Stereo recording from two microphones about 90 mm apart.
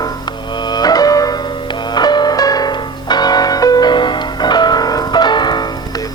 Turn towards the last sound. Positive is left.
turn(degrees=50)  # may be behind; listen again after turning